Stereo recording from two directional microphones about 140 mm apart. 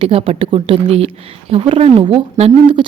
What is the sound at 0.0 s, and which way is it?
Speech, 40° right (ahead or behind).